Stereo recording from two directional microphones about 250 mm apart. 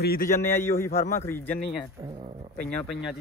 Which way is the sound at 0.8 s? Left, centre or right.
Left.